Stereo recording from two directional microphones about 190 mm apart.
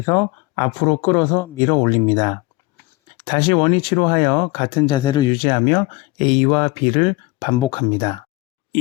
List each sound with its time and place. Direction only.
0.0 s speech: 15° left (ahead or behind)